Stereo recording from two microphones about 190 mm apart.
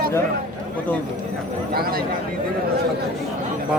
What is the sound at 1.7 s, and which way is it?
Speech, 50° right (ahead or behind).